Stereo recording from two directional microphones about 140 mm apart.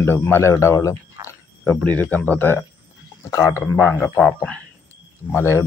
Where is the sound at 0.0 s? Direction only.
15° left (ahead or behind).